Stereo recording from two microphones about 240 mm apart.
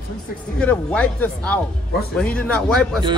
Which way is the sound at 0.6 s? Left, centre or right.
Centre.